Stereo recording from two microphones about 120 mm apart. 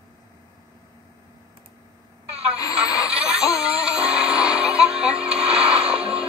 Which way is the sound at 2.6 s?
30° left (ahead or behind).